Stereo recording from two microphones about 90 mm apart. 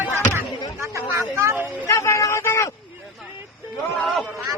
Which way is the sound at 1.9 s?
35° left (ahead or behind).